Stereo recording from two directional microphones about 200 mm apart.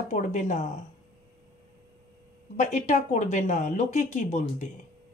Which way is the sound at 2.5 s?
40° left (ahead or behind).